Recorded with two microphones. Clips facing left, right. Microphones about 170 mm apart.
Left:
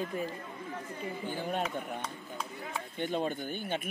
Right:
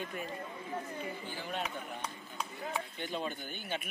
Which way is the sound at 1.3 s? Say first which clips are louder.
Left 8 dB; 50° left (ahead or behind).